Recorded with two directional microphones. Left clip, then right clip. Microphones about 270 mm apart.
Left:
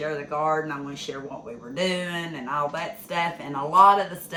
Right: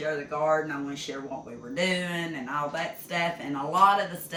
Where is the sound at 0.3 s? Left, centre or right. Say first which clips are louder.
Left 1 dB; centre.